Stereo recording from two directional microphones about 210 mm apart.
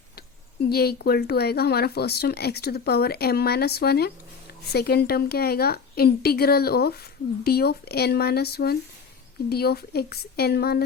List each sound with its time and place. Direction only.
0.2 s speech: 50° left (ahead or behind)